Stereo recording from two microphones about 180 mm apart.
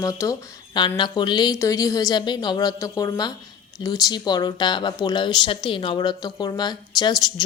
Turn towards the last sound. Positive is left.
turn(degrees=20)  # may be behind; listen again after turning